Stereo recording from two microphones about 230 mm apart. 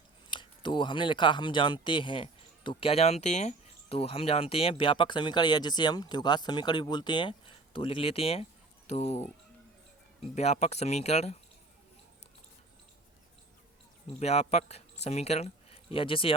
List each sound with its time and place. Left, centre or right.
0.3 s speech: left
10.3 s speech: left
14.2 s speech: left